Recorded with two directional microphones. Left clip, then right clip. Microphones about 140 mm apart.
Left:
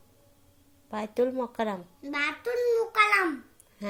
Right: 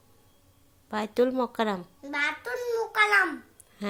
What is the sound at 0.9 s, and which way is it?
A child's voice, 25° right (ahead or behind).